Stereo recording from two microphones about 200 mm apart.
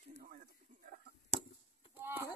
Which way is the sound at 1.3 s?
35° right (ahead or behind).